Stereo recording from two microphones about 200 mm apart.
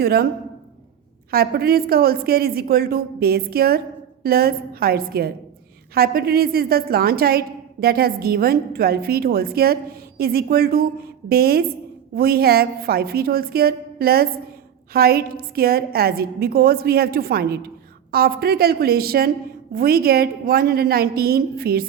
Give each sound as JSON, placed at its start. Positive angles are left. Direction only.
{"t": 0.0, "sound": "a woman's voice", "side_deg": -50}
{"t": 1.3, "sound": "a woman's voice", "side_deg": -50}